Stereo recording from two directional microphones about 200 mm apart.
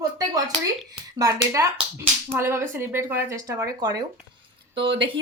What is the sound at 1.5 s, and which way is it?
A woman's voice, 15° right (ahead or behind).